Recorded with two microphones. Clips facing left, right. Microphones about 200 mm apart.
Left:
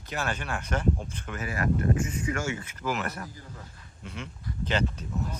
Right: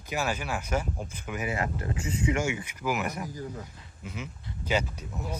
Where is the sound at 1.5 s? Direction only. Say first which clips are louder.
Left 6 dB; 20° right (ahead or behind).